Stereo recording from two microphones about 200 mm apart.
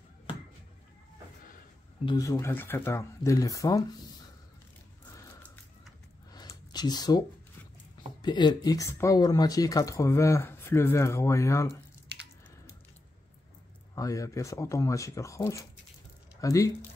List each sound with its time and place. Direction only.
2.0 s speech: 20° left (ahead or behind)
6.3 s a sound: 20° left (ahead or behind)
8.2 s speech: 20° left (ahead or behind)
13.9 s speech: 15° left (ahead or behind)